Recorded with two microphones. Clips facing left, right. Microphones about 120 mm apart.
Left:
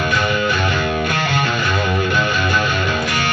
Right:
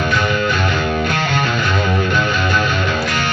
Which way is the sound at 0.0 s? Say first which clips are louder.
Right 1 dB; 10° left (ahead or behind).